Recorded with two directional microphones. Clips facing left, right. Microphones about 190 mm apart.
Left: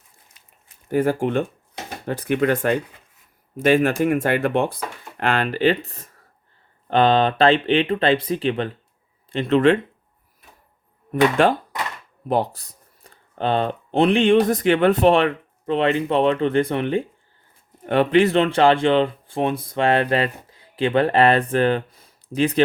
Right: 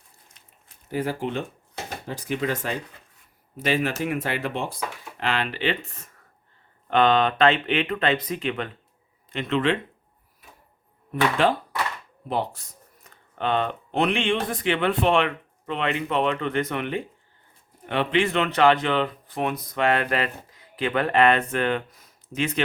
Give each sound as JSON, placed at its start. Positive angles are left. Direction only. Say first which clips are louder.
{"t": 0.9, "sound": "speech", "louder": "left 7 dB", "side_deg": 50}
{"t": 11.1, "sound": "speech", "louder": "left 5 dB", "side_deg": 50}
{"t": 17.8, "sound": "speech", "louder": "left 7 dB", "side_deg": 45}